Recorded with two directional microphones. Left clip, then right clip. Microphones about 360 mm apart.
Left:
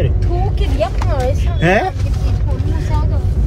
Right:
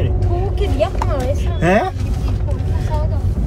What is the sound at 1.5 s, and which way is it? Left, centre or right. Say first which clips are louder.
Speech: left 1 dB; centre.